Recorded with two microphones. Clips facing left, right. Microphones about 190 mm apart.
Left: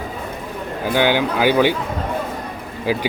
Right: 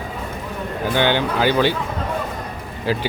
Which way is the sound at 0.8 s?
10° left (ahead or behind).